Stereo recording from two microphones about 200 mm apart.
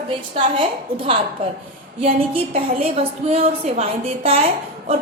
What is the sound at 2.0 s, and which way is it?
A woman's voice, 30° right (ahead or behind).